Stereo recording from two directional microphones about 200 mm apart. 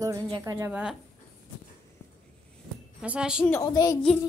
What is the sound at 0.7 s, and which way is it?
Speech, 5° right (ahead or behind).